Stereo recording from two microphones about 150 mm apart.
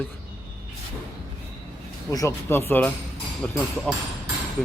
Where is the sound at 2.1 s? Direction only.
20° left (ahead or behind).